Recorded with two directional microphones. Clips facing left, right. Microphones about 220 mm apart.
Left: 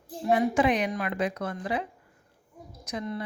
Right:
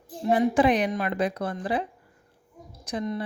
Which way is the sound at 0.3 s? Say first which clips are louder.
Right 3 dB; 35° right (ahead or behind).